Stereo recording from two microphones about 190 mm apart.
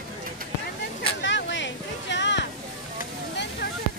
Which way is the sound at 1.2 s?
70° left (ahead or behind).